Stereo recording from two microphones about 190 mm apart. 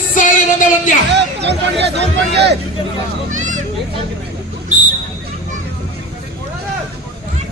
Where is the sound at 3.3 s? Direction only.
40° right (ahead or behind).